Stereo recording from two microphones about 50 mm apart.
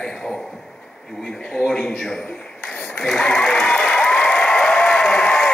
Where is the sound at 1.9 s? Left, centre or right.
Centre.